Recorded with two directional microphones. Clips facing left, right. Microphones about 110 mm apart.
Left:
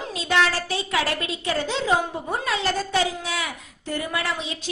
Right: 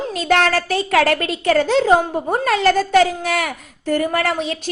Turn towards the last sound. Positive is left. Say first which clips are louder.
# right 8 dB
turn(degrees=-55)  # may be behind; listen again after turning